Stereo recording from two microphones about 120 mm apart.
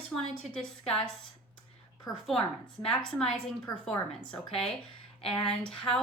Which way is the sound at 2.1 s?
30° left (ahead or behind).